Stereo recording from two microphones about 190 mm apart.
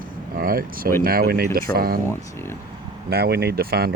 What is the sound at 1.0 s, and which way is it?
Speech, 50° right (ahead or behind).